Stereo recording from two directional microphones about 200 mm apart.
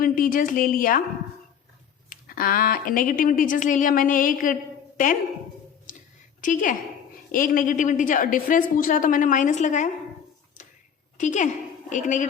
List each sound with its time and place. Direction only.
0.0 s a woman's voice: 45° left (ahead or behind)
2.0 s a woman's voice: 45° left (ahead or behind)
6.4 s a woman's voice: 40° left (ahead or behind)
11.2 s a woman's voice: 40° left (ahead or behind)